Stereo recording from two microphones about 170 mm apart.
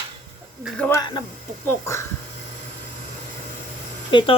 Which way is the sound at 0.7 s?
10° left (ahead or behind).